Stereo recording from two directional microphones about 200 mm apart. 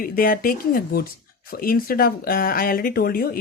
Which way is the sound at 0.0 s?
45° left (ahead or behind).